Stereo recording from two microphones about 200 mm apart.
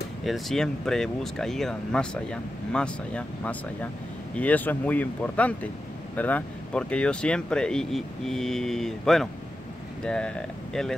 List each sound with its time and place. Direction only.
0.2 s speech: centre (ahead or behind)